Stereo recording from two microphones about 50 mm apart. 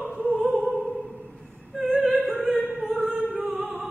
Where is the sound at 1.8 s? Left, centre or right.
Centre.